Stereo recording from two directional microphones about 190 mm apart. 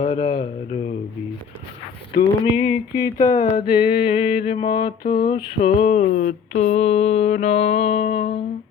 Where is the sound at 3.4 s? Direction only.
50° left (ahead or behind).